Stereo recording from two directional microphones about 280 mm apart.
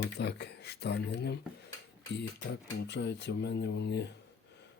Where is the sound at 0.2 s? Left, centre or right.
Left.